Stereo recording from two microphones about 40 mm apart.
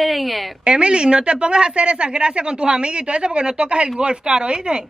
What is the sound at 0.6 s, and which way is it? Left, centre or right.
A woman's voice, right.